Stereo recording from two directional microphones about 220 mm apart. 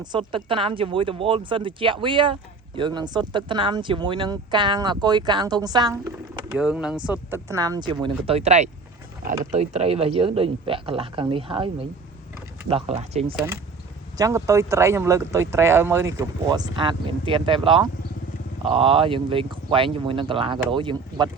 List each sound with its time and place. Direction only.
0.0 s speech: 20° right (ahead or behind)
6.6 s speech: 5° right (ahead or behind); by 13.3 s 30° right (ahead or behind)
14.2 s speech: 15° right (ahead or behind)